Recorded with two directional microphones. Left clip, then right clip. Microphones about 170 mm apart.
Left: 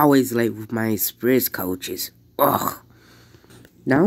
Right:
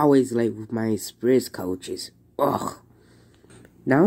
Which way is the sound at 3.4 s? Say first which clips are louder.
Left 1 dB; 5° right (ahead or behind).